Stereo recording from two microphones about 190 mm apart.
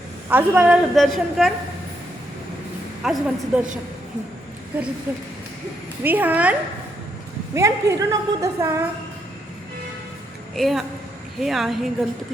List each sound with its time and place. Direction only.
0.3 s a woman's voice: 10° right (ahead or behind)
3.0 s a woman's voice: 5° right (ahead or behind)
5.1 s a woman's voice: 10° right (ahead or behind)
10.5 s a woman's voice: centre (ahead or behind)